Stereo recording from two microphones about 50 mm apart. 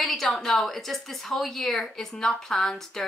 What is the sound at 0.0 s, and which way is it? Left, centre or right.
A woman's voice, centre.